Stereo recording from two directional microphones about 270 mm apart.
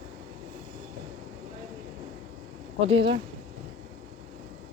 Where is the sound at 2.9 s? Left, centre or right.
Centre.